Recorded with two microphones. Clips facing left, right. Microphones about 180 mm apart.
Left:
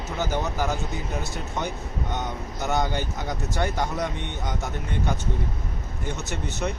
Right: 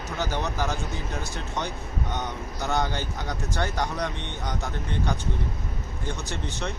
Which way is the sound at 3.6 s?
5° left (ahead or behind).